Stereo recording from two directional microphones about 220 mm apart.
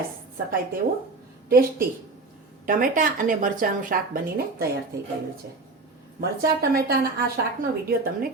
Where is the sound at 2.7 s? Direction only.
40° right (ahead or behind).